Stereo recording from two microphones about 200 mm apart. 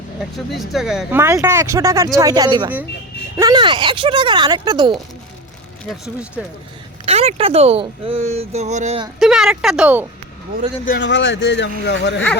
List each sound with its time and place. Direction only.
0.2 s speech: centre (ahead or behind); by 4.9 s 20° right (ahead or behind)
6.4 s speech: 5° right (ahead or behind)
7.0 s speech: 30° right (ahead or behind)
9.1 s speech: centre (ahead or behind)
11.0 s speech: 65° left (ahead or behind)